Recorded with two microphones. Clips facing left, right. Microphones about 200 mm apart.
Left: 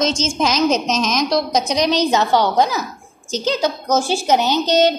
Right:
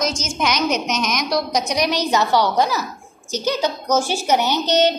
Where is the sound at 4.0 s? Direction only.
20° left (ahead or behind).